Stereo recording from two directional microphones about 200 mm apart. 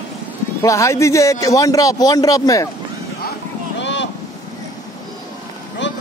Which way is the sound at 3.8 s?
65° left (ahead or behind).